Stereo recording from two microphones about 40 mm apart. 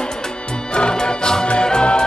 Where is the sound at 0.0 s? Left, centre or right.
Centre.